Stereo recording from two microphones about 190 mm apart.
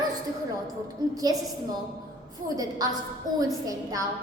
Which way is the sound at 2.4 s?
20° right (ahead or behind).